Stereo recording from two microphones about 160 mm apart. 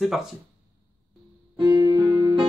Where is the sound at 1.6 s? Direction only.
30° right (ahead or behind).